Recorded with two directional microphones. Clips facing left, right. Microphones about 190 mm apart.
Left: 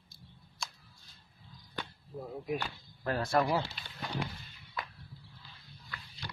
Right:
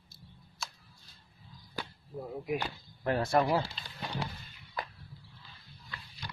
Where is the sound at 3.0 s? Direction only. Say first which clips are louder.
Right 2 dB; 25° right (ahead or behind).